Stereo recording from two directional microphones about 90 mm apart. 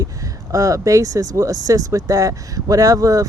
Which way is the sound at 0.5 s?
35° right (ahead or behind).